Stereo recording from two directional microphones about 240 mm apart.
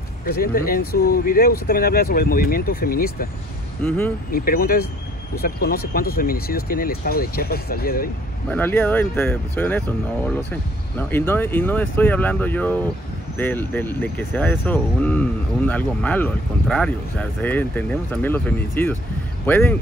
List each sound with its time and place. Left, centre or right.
0.2 s speech: left
3.8 s speech: centre
4.3 s speech: left
8.5 s speech: centre